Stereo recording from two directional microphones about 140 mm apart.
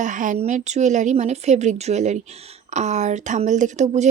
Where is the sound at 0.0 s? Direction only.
65° right (ahead or behind).